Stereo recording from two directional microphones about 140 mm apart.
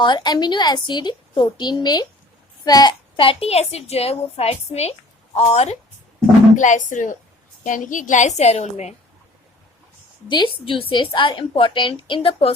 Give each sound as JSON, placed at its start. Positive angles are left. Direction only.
{"t": 0.0, "sound": "a woman's voice", "side_deg": 30}
{"t": 6.6, "sound": "a woman's voice", "side_deg": 65}
{"t": 10.2, "sound": "a woman's voice", "side_deg": 35}